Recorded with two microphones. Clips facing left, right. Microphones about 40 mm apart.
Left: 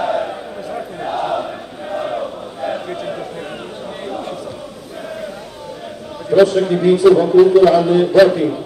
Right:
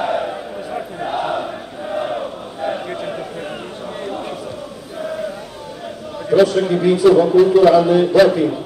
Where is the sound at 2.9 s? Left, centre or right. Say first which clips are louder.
Left 1 dB; centre.